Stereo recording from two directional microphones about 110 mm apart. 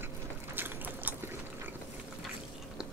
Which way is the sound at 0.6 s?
15° right (ahead or behind).